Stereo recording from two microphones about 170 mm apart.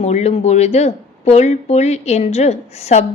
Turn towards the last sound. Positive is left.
turn(degrees=40)  # may be behind; listen again after turning